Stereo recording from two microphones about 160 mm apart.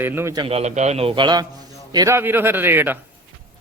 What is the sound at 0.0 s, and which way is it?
Speech, 15° right (ahead or behind).